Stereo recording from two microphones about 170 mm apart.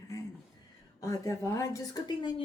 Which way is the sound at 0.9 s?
20° left (ahead or behind).